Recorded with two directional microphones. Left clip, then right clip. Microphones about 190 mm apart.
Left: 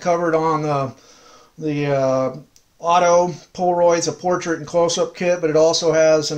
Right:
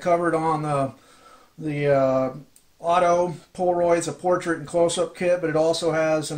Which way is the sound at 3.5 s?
30° left (ahead or behind).